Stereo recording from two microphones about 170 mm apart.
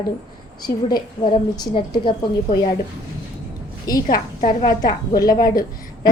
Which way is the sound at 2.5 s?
60° left (ahead or behind).